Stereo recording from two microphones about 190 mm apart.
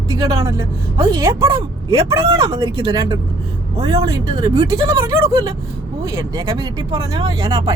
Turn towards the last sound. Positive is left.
turn(degrees=-20)  # may be behind; listen again after turning